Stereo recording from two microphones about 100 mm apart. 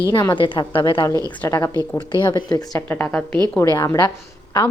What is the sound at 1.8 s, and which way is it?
Speech, 50° left (ahead or behind).